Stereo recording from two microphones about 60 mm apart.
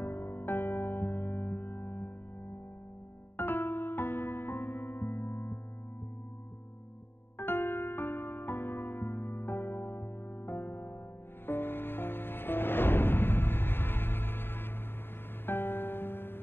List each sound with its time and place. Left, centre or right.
0.0 s music: left
3.3 s music: left
7.3 s music: left